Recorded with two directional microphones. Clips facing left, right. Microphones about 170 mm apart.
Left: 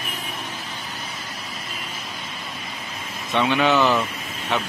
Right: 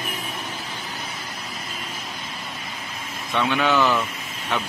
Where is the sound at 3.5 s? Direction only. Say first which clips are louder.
Left 2 dB; 15° left (ahead or behind).